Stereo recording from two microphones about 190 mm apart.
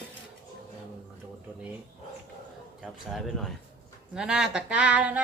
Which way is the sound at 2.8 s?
Centre (ahead or behind).